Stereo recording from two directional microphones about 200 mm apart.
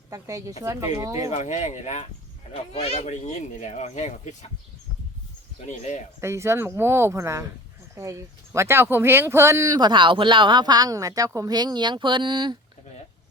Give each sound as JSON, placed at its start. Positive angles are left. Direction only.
{"t": 0.1, "sound": "speech", "side_deg": -15}
{"t": 1.3, "sound": "speech", "side_deg": 35}
{"t": 5.5, "sound": "speech", "side_deg": 35}
{"t": 6.1, "sound": "speech", "side_deg": -15}